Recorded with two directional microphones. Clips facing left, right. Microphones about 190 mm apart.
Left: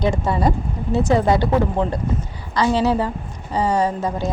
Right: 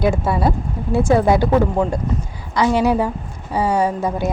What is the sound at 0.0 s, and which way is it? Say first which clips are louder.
A woman's voice: right 1 dB; 10° right (ahead or behind).